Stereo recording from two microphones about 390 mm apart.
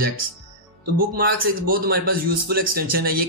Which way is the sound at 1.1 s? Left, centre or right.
Right.